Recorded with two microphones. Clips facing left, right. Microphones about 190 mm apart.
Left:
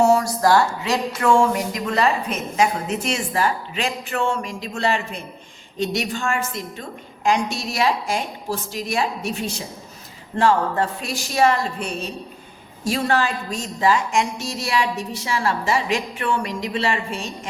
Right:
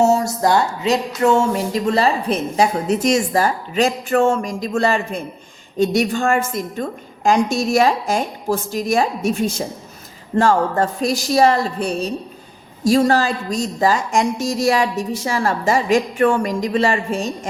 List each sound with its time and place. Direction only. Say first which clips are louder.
0.0 s a woman's voice: right 1 dB; 25° right (ahead or behind); by 17.3 s 45° right (ahead or behind)